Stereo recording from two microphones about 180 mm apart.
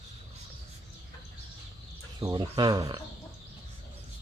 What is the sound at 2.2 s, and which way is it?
Speech, 25° right (ahead or behind).